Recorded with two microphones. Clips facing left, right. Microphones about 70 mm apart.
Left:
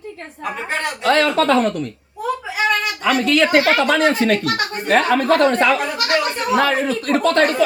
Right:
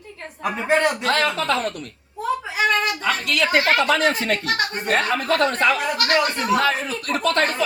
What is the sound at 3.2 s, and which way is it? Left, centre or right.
Speech, left.